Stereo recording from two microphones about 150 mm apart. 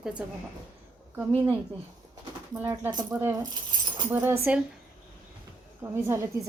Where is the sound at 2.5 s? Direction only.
15° right (ahead or behind).